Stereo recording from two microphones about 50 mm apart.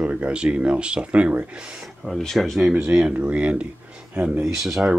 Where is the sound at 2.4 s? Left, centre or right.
Centre.